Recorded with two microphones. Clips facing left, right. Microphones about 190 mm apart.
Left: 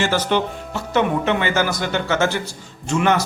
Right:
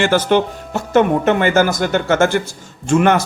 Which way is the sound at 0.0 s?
55° right (ahead or behind).